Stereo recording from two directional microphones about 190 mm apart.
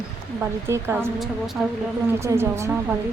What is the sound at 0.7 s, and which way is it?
Speech, 15° right (ahead or behind).